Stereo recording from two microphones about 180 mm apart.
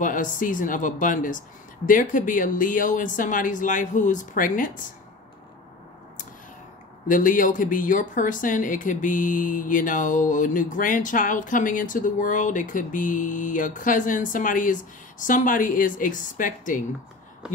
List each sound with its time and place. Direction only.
0.0 s speech: 45° left (ahead or behind)
7.1 s speech: 50° left (ahead or behind)